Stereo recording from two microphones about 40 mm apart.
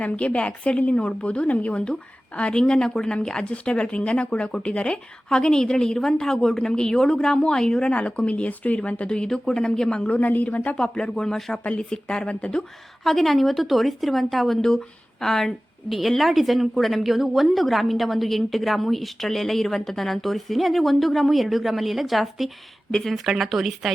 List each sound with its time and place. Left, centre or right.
0.0 s a woman's voice: left
5.3 s a woman's voice: centre; by 8.8 s left
9.0 s a woman's voice: centre
10.1 s a woman's voice: left
10.8 s a woman's voice: left
11.8 s a woman's voice: centre
13.1 s a woman's voice: centre
15.9 s a woman's voice: centre
22.9 s speech: centre
23.1 s a woman's voice: centre